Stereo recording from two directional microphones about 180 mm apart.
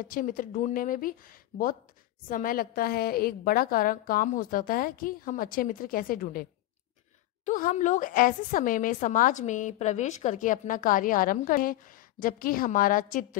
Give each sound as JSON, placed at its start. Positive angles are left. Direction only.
{"t": 0.0, "sound": "a woman's voice", "side_deg": 50}
{"t": 7.4, "sound": "a woman's voice", "side_deg": 45}